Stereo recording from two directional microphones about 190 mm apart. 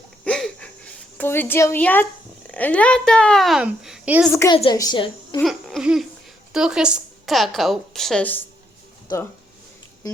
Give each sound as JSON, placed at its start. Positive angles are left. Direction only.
{"t": 0.3, "sound": "a sound", "side_deg": 5}
{"t": 1.2, "sound": "a woman's voice", "side_deg": 10}
{"t": 4.3, "sound": "a woman's voice", "side_deg": 15}
{"t": 4.5, "sound": "a woman's voice", "side_deg": 25}
{"t": 5.4, "sound": "babbling", "side_deg": 0}
{"t": 6.5, "sound": "a woman's voice", "side_deg": -5}